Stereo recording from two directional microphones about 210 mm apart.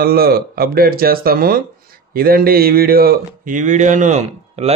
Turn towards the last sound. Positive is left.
turn(degrees=-30)  # may be behind; listen again after turning